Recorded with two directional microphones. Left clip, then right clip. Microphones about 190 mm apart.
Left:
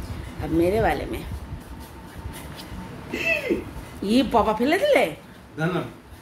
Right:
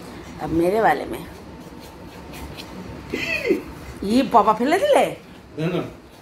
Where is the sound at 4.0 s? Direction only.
10° left (ahead or behind).